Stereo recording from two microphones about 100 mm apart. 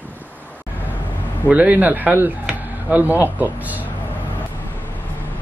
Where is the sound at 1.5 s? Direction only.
15° right (ahead or behind).